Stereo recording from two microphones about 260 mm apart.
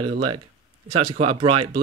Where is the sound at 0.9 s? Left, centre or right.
Right.